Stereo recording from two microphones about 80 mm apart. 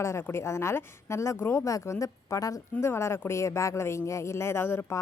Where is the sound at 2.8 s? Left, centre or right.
Left.